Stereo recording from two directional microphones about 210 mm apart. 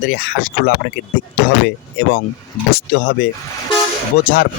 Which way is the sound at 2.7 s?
50° left (ahead or behind).